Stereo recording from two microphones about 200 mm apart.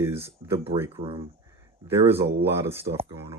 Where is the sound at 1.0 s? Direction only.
25° right (ahead or behind).